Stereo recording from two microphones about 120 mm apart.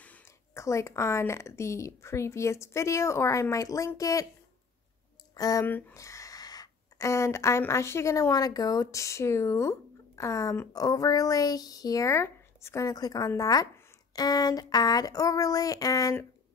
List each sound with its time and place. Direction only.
0.0 s a sound: 10° left (ahead or behind)
0.6 s speech: 25° left (ahead or behind)
5.3 s speech: 30° left (ahead or behind)
5.7 s speech: 15° left (ahead or behind)
5.9 s speech: 25° left (ahead or behind)
14.1 s a sound: 35° left (ahead or behind)